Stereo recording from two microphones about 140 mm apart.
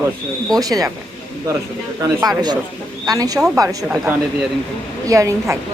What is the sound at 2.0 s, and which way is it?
A woman's voice, 25° right (ahead or behind).